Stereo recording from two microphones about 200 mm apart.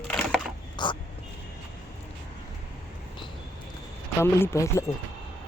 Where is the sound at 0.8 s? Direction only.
20° left (ahead or behind).